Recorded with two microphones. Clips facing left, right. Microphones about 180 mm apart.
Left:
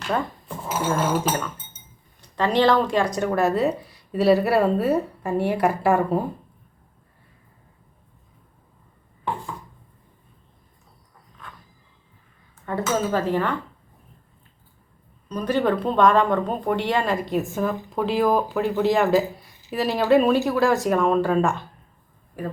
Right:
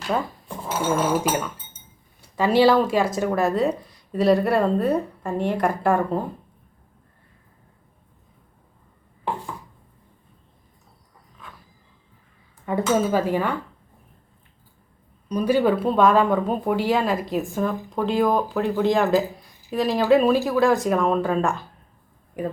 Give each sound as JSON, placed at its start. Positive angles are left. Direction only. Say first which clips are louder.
{"t": 0.1, "sound": "cutlery", "louder": "even", "side_deg": 0}
{"t": 0.9, "sound": "speech", "louder": "right 2 dB", "side_deg": -5}
{"t": 12.7, "sound": "dishes", "louder": "right 3 dB", "side_deg": -15}
{"t": 15.3, "sound": "speech", "louder": "right 3 dB", "side_deg": -10}
{"t": 22.4, "sound": "dishes", "louder": "right 3 dB", "side_deg": -15}